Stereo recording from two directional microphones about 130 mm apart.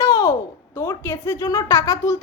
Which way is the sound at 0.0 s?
25° left (ahead or behind).